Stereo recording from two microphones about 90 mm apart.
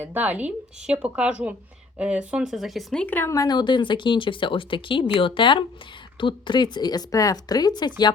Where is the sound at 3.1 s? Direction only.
25° left (ahead or behind).